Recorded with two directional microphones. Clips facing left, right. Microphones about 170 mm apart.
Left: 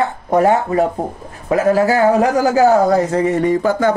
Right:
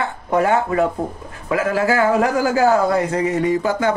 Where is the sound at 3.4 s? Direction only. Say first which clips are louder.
Left 3 dB; 50° left (ahead or behind).